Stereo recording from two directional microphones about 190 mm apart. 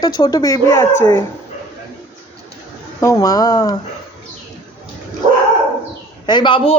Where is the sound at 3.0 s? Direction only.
15° left (ahead or behind).